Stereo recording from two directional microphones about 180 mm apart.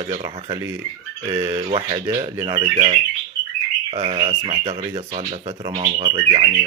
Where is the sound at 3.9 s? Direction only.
30° right (ahead or behind).